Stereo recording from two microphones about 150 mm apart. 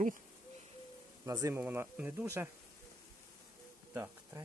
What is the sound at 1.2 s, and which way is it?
Speech, 20° right (ahead or behind).